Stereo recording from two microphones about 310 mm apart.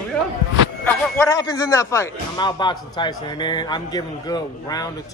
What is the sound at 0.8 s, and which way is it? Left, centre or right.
A man's voice, centre.